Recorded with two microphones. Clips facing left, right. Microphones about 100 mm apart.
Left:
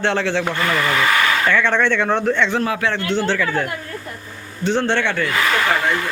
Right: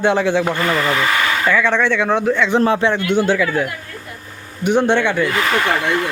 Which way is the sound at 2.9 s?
15° right (ahead or behind).